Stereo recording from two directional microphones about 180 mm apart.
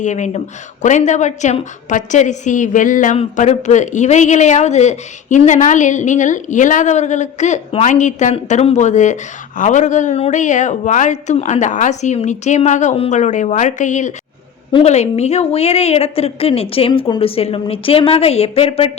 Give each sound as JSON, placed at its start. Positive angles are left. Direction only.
{"t": 0.0, "sound": "speech", "side_deg": 40}